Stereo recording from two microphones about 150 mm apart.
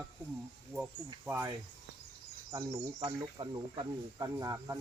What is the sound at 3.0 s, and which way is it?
Speech, 30° right (ahead or behind).